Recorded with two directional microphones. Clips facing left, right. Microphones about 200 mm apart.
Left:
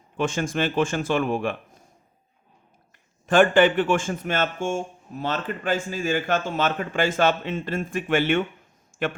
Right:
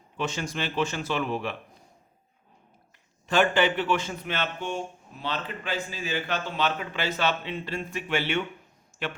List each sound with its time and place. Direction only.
0.2 s speech: 50° left (ahead or behind)
3.2 s speech: 50° left (ahead or behind)
8.9 s a sound: 50° left (ahead or behind)